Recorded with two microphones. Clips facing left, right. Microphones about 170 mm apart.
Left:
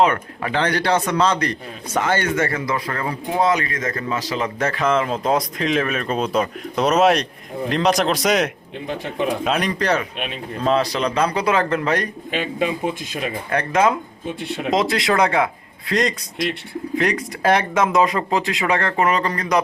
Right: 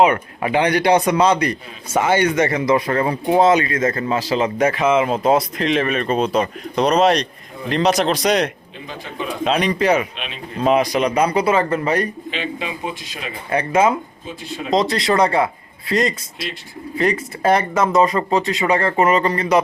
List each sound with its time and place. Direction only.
0.0 s speech: 15° right (ahead or behind)
12.3 s speech: 45° left (ahead or behind)
13.5 s speech: 10° right (ahead or behind)
14.4 s speech: 65° left (ahead or behind)
14.7 s speech: centre (ahead or behind)